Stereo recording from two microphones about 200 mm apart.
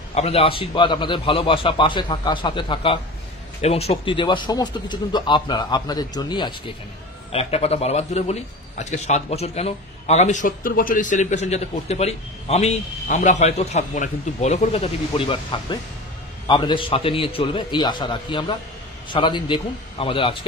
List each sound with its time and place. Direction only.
0.1 s a man's voice: 30° left (ahead or behind)